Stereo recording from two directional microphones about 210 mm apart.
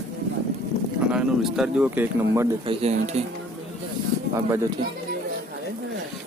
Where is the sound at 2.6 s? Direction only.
25° right (ahead or behind).